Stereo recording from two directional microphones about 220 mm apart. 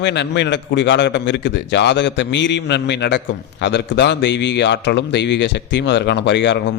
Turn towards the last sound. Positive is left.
turn(degrees=55)  # may be behind; listen again after turning